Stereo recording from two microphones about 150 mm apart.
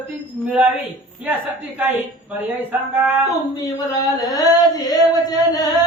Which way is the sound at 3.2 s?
20° left (ahead or behind).